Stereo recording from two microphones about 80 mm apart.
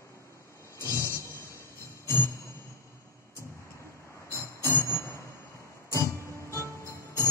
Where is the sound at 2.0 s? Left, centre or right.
Left.